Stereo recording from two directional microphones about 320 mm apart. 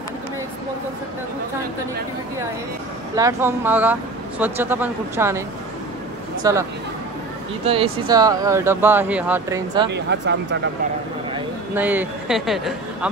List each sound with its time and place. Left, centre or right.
3.2 s speech: centre
6.4 s speech: centre
7.6 s speech: centre
9.8 s speech: right
11.3 s speech: centre